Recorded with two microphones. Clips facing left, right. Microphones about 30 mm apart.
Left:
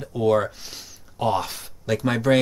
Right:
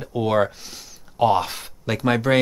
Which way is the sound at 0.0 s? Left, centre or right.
Right.